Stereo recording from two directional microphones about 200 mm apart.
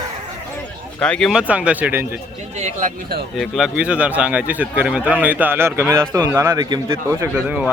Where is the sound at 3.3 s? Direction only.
Centre (ahead or behind).